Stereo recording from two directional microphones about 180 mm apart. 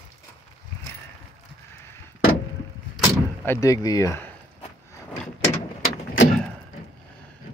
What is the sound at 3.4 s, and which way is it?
Speech, 15° left (ahead or behind).